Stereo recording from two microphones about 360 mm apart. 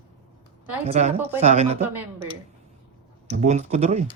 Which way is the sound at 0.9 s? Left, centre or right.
Centre.